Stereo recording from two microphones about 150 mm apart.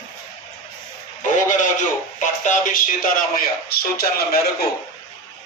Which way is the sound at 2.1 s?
55° left (ahead or behind).